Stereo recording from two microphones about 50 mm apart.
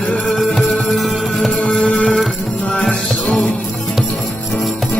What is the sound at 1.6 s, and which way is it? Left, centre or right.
Music, left.